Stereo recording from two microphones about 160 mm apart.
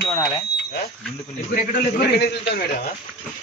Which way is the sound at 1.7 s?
80° left.